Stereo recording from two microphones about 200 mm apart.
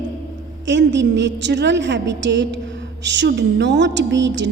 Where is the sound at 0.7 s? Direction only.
60° right (ahead or behind).